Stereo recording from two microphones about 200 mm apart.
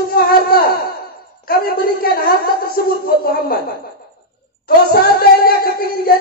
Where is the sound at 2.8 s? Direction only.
50° left (ahead or behind).